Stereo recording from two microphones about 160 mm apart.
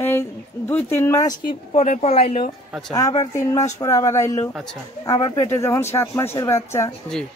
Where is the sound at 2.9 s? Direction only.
20° left (ahead or behind).